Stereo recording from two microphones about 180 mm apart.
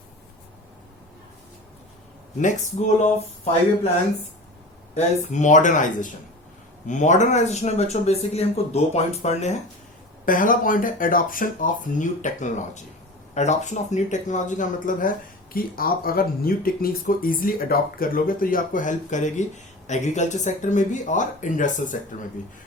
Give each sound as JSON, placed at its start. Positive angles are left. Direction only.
{"t": 2.4, "sound": "speech", "side_deg": 40}
{"t": 4.9, "sound": "speech", "side_deg": 40}
{"t": 10.2, "sound": "speech", "side_deg": 50}